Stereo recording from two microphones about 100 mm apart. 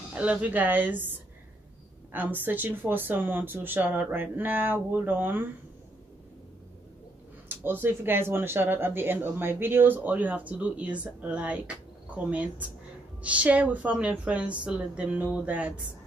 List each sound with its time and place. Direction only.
0.1 s a woman's voice: 10° right (ahead or behind)
2.3 s speech: 20° right (ahead or behind)
7.4 s a woman's voice: 20° right (ahead or behind)